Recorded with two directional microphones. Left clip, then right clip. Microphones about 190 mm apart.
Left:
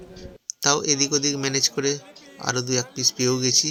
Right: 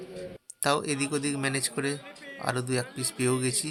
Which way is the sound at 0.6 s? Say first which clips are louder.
Left 6 dB; 10° left (ahead or behind).